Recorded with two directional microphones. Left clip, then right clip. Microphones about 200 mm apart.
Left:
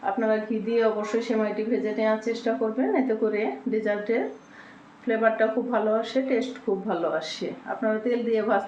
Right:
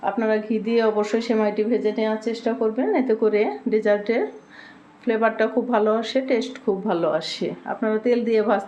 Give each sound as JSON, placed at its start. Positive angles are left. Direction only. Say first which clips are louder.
{"t": 0.0, "sound": "speech", "louder": "right 2 dB", "side_deg": -55}